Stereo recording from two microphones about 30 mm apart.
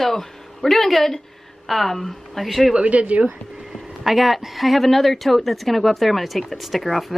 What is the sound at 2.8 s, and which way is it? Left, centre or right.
Speech, right.